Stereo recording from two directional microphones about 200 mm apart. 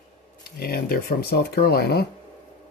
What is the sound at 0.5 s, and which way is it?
Speech, 50° left (ahead or behind).